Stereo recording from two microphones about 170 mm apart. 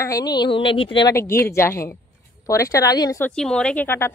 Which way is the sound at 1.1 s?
15° left (ahead or behind).